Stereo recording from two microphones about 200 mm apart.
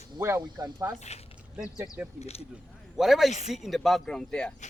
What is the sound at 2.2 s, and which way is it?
Speech, 30° left (ahead or behind).